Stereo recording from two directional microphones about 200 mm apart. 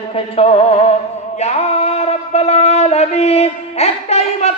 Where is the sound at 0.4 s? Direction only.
30° left (ahead or behind).